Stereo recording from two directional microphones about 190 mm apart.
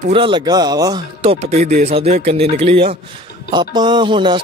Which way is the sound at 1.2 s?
30° right (ahead or behind).